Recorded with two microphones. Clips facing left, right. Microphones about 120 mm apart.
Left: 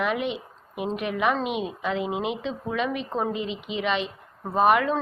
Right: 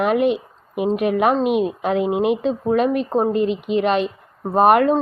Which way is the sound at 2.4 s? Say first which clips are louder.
Right 10 dB; 45° right (ahead or behind).